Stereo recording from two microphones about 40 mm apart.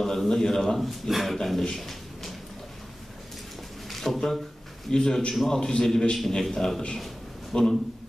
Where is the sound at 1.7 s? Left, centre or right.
Centre.